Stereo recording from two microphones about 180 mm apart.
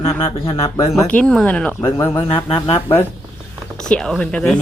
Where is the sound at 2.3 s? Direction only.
30° left (ahead or behind).